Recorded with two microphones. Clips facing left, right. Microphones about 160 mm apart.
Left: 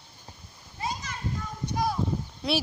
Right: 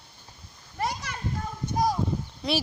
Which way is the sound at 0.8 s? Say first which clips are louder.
Right 3 dB; 75° right (ahead or behind).